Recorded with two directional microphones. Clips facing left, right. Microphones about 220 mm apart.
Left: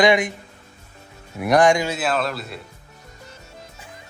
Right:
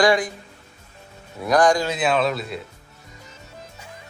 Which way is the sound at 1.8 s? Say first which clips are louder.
Right 2 dB; 5° left (ahead or behind).